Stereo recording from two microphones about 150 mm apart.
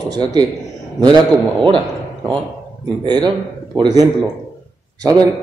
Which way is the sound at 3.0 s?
30° right (ahead or behind).